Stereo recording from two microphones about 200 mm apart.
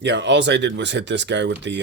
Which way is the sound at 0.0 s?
60° right (ahead or behind).